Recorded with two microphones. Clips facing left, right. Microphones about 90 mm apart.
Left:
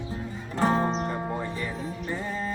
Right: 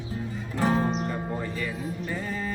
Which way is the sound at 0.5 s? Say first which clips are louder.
Left 1 dB; 35° left (ahead or behind).